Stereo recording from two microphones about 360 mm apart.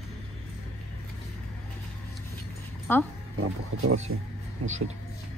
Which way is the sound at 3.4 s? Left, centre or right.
Right.